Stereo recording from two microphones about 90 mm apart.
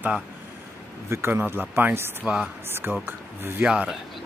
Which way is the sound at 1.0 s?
30° right (ahead or behind).